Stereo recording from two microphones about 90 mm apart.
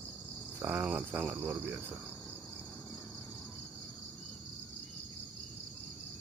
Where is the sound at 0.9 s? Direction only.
10° right (ahead or behind).